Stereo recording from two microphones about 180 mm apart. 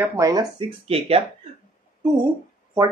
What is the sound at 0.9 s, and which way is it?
Speech, 30° right (ahead or behind).